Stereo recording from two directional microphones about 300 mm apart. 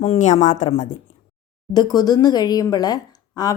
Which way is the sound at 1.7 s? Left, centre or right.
Centre.